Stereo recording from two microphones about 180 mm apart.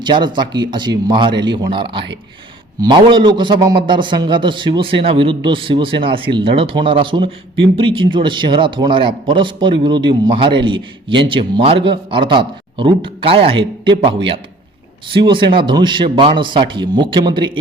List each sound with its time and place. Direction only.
0.0 s a man's voice: 25° right (ahead or behind)